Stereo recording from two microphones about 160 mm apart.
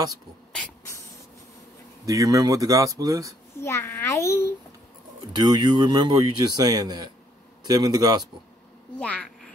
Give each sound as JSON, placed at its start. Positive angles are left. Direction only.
{"t": 2.0, "sound": "speech", "side_deg": -20}
{"t": 3.5, "sound": "a child's voice", "side_deg": 15}
{"t": 5.3, "sound": "speech", "side_deg": -25}
{"t": 9.0, "sound": "speech", "side_deg": 10}